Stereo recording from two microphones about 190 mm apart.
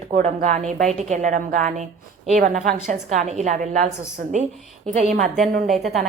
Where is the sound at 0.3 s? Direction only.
40° right (ahead or behind).